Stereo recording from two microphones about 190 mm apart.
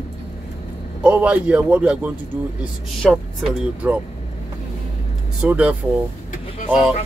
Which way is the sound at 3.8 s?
10° right (ahead or behind).